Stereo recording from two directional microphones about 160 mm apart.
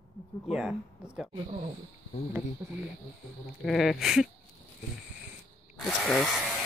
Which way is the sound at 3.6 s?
Centre (ahead or behind).